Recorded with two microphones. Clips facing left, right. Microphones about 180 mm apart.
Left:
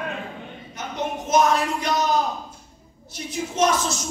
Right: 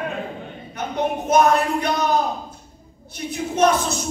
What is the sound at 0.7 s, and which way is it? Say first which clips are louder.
Speech: right 5 dB; 60° right (ahead or behind).